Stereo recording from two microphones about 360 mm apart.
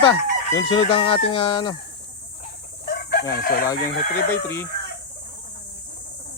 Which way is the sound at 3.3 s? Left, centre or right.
Left.